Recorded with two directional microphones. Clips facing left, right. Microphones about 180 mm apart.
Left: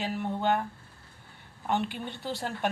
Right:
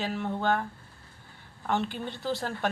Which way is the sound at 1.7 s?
15° left (ahead or behind).